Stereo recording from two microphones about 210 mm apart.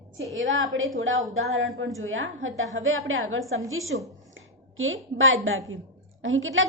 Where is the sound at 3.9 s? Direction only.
60° right (ahead or behind).